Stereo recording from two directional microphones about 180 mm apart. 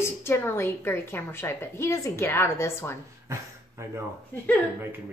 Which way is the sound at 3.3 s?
15° right (ahead or behind).